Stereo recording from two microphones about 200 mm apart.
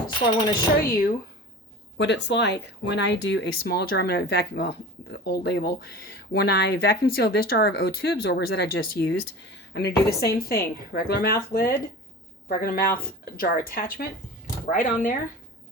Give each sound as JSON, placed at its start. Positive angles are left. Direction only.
{"t": 0.8, "sound": "speech", "side_deg": 50}
{"t": 2.0, "sound": "speech", "side_deg": 60}
{"t": 9.0, "sound": "speech", "side_deg": 60}